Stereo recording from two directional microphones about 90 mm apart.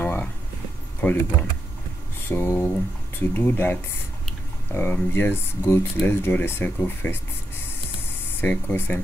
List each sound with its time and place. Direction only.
0.0 s a sound: 20° left (ahead or behind)
1.0 s speech: 15° left (ahead or behind)
2.2 s speech: 25° left (ahead or behind)
8.4 s speech: 20° left (ahead or behind)